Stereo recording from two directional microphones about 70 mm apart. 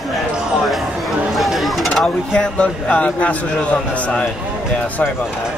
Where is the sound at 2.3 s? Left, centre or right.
Centre.